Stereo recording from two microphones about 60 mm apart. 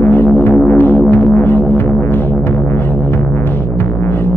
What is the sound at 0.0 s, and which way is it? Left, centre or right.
Music, left.